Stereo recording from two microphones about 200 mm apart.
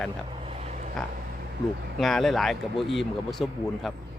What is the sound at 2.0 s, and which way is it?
Speech, centre (ahead or behind).